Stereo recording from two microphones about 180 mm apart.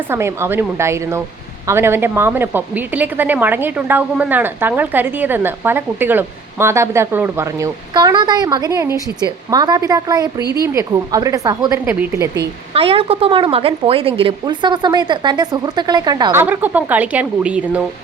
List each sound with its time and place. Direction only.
0.1 s a woman's voice: 15° right (ahead or behind)
12.7 s speech: 30° right (ahead or behind)
16.4 s a woman's voice: 10° right (ahead or behind)